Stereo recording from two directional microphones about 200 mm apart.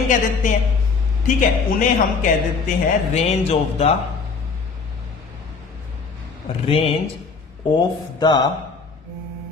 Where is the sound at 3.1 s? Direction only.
35° left (ahead or behind).